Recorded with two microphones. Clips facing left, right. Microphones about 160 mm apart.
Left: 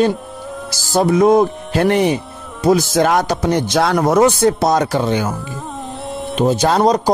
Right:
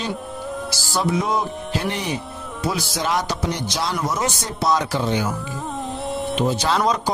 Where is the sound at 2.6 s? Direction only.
45° left (ahead or behind).